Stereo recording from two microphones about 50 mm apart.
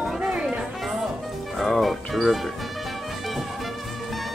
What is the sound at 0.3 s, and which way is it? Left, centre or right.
Chatter, centre.